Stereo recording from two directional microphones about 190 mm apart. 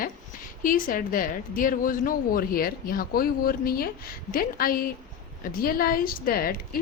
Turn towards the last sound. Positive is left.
turn(degrees=50)  # may be behind; listen again after turning